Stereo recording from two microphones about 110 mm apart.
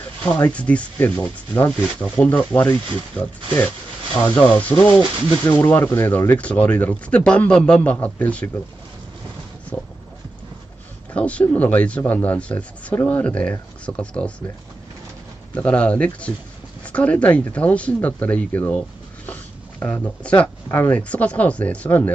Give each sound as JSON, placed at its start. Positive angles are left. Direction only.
{"t": 0.2, "sound": "speech", "side_deg": 15}
{"t": 9.7, "sound": "speech", "side_deg": 15}
{"t": 11.1, "sound": "speech", "side_deg": 10}
{"t": 15.5, "sound": "speech", "side_deg": 10}
{"t": 19.8, "sound": "speech", "side_deg": 15}